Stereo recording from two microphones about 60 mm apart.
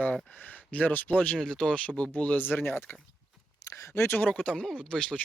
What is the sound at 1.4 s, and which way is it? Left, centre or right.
Speech, centre.